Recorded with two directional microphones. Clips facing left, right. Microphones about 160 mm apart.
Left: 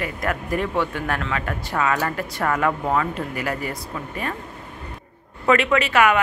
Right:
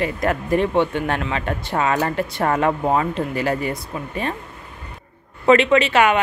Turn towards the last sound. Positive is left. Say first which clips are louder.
# right 2 dB
turn(degrees=-25)  # may be behind; listen again after turning